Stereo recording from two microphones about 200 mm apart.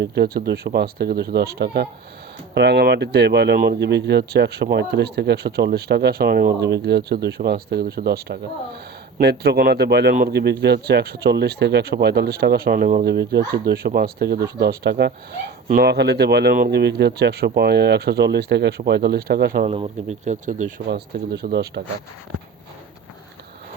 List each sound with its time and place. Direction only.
0.0 s speech: 55° right (ahead or behind)
19.6 s speech: 30° right (ahead or behind); by 21.8 s 50° right (ahead or behind)